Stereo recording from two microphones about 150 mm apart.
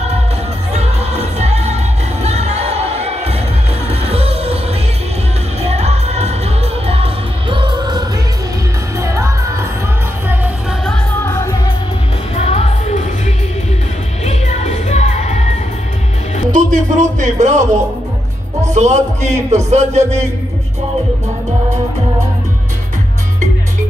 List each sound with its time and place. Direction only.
0.7 s music: 45° right (ahead or behind)
5.6 s music: 45° right (ahead or behind); by 9.7 s 20° right (ahead or behind)
11.2 s music: 20° left (ahead or behind)
12.4 s music: 45° left (ahead or behind)
14.2 s music: 50° left (ahead or behind)
16.5 s music: 55° right (ahead or behind)